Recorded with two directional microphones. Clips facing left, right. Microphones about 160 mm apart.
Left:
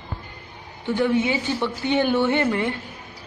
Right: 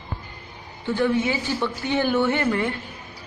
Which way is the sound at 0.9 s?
20° left (ahead or behind).